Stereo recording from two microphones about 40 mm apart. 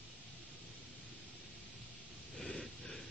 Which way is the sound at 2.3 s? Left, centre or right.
Left.